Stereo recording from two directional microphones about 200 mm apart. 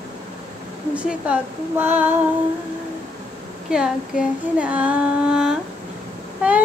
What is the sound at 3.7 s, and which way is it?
Child singing, 5° right (ahead or behind).